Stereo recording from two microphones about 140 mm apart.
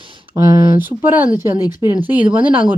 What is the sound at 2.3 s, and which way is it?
Speech, 10° right (ahead or behind).